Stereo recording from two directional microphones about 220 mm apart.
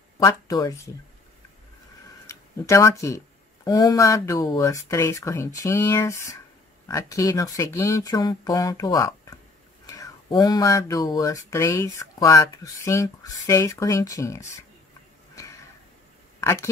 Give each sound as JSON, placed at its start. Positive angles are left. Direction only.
{"t": 0.2, "sound": "speech", "side_deg": 15}
{"t": 2.2, "sound": "speech", "side_deg": 15}
{"t": 15.3, "sound": "a sound", "side_deg": 15}